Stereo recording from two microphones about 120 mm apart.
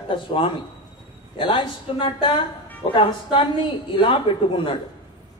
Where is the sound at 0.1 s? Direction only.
45° left (ahead or behind).